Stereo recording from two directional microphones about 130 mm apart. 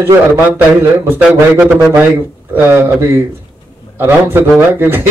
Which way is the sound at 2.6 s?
20° right (ahead or behind).